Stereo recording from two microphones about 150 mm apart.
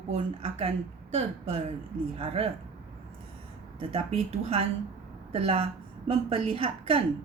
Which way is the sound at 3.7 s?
40° right (ahead or behind).